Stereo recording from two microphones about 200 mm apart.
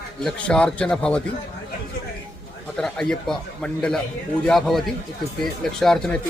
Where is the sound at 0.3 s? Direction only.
5° left (ahead or behind).